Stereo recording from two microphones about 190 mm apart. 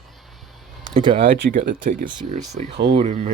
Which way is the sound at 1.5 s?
45° right (ahead or behind).